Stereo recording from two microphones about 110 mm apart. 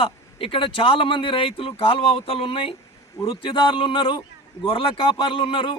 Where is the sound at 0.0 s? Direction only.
55° left (ahead or behind).